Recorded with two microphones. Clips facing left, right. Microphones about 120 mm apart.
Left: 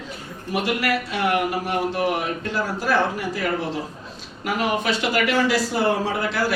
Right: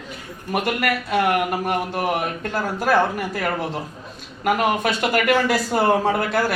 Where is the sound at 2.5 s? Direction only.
50° right (ahead or behind).